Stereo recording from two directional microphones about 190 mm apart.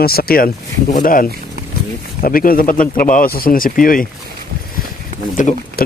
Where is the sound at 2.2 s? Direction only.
50° left (ahead or behind).